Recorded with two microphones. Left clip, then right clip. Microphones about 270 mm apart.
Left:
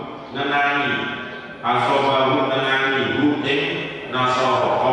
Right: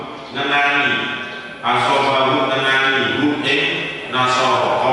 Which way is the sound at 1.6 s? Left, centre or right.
Centre.